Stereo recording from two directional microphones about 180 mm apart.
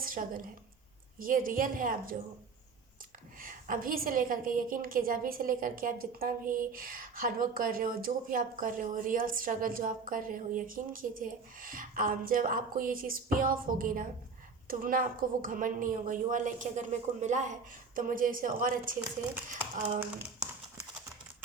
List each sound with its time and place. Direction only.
0.0 s a woman's voice: 50° right (ahead or behind)
3.4 s a woman's voice: 50° right (ahead or behind)